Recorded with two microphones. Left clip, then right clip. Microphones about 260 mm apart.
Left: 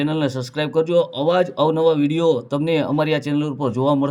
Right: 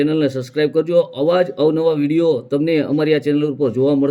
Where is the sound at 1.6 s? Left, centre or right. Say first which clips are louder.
Right 1 dB; left.